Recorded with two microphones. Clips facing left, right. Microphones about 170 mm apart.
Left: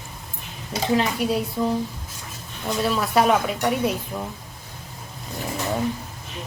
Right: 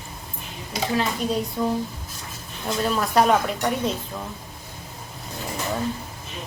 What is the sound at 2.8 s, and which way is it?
A woman's voice, 5° left (ahead or behind).